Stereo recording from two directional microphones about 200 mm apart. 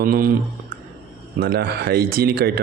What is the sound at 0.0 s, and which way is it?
Speech, 45° right (ahead or behind).